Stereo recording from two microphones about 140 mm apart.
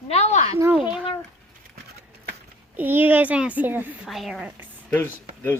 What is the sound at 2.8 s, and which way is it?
A child's voice, 15° right (ahead or behind).